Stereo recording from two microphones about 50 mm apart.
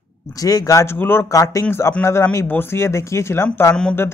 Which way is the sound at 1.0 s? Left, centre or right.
Left.